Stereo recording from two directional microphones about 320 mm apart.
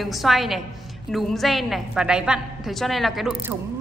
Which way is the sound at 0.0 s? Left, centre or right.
Centre.